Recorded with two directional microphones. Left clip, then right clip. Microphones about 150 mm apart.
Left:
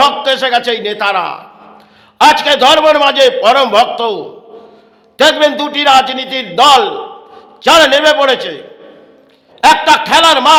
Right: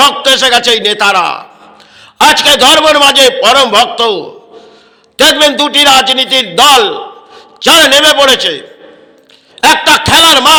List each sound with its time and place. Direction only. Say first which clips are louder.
0.0 s a man's voice: right 4 dB; 10° right (ahead or behind)